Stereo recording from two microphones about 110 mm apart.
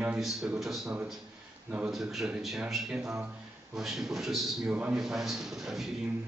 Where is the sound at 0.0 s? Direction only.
5° right (ahead or behind).